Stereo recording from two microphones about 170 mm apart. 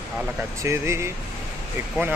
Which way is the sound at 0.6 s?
15° right (ahead or behind).